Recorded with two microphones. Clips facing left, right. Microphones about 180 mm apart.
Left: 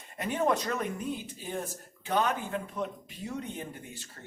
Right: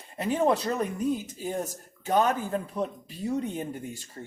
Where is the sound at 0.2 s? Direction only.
30° right (ahead or behind).